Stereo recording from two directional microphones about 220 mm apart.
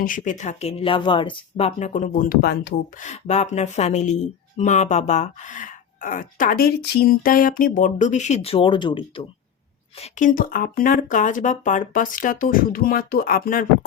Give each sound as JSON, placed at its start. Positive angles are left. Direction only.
{"t": 0.0, "sound": "speech", "side_deg": 35}
{"t": 3.1, "sound": "speech", "side_deg": 30}
{"t": 10.0, "sound": "speech", "side_deg": 35}